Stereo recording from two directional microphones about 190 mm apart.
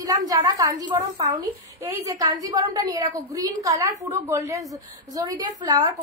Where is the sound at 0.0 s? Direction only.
20° right (ahead or behind).